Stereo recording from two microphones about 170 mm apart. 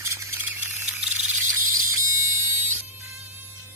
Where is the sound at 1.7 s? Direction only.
20° right (ahead or behind).